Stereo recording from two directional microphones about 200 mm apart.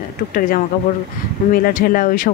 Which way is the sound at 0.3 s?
45° left (ahead or behind).